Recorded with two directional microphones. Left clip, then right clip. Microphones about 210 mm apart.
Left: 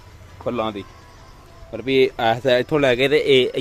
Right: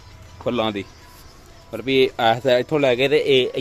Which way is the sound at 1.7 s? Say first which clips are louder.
Even; centre (ahead or behind).